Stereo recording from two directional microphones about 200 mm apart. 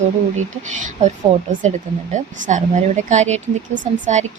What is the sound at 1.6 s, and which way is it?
Speech, 35° right (ahead or behind).